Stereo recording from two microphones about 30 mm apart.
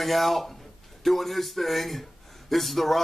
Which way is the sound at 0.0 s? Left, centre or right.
Centre.